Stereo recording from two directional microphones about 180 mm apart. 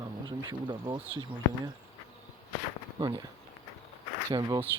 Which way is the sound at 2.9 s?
25° right (ahead or behind).